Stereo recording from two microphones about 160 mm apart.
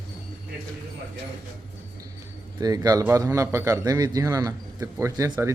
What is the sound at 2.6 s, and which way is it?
A man's voice, 25° right (ahead or behind).